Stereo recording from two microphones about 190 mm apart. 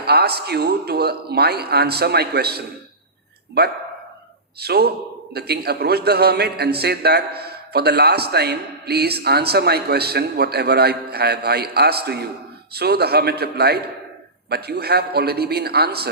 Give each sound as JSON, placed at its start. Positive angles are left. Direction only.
{"t": 0.0, "sound": "a man's voice", "side_deg": -55}